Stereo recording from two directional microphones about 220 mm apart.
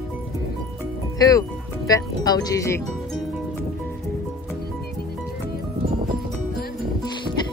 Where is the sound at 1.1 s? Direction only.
15° left (ahead or behind).